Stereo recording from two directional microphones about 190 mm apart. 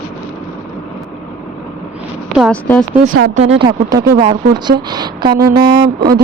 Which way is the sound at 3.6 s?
20° right (ahead or behind).